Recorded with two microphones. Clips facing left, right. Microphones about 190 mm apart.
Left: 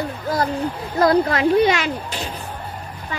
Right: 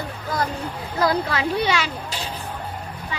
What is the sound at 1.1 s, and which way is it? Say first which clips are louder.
Speech: left 7 dB; 40° left (ahead or behind).